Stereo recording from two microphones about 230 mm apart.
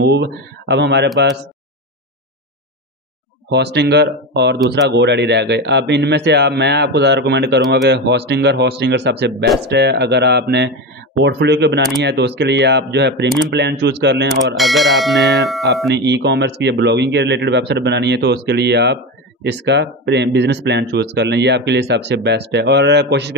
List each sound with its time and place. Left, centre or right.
0.0 s speech: right
3.5 s speech: right
14.5 s speech: centre
16.0 s speech: right